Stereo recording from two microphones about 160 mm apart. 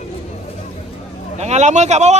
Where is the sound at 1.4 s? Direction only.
45° right (ahead or behind).